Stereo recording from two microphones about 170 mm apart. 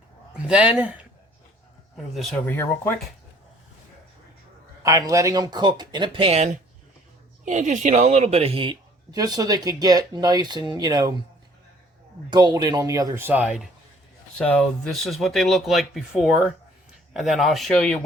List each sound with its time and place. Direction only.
0.4 s speech: 5° right (ahead or behind)
2.5 s speech: 15° left (ahead or behind)
4.8 s speech: 20° right (ahead or behind)
12.3 s speech: 25° right (ahead or behind); by 13.7 s 5° right (ahead or behind)
14.3 s speech: 5° left (ahead or behind)